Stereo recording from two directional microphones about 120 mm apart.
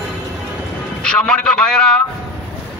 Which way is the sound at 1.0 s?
5° left (ahead or behind).